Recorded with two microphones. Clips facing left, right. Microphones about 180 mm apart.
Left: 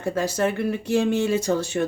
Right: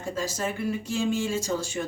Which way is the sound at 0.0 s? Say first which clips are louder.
Left 7 dB; 60° left (ahead or behind).